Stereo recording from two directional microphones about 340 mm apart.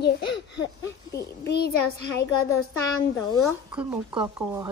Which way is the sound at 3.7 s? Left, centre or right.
Centre.